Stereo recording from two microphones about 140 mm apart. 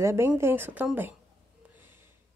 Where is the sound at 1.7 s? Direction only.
15° right (ahead or behind).